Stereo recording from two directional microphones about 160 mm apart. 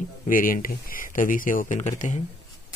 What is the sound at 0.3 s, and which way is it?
Speech, 60° left (ahead or behind).